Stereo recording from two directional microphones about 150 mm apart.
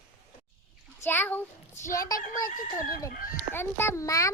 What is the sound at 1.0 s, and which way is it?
A child's voice, 15° left (ahead or behind).